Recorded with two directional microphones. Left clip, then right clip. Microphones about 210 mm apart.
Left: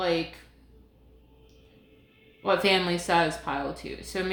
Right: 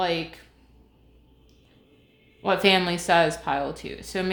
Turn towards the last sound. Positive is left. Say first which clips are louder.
# right 2 dB
turn(degrees=-35)  # may be behind; listen again after turning